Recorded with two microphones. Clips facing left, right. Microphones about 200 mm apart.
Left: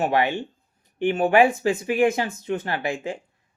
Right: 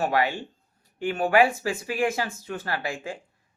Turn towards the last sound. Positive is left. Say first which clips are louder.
# left 4 dB
turn(degrees=20)  # may be behind; listen again after turning